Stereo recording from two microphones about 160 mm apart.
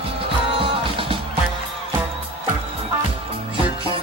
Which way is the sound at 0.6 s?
35° right (ahead or behind).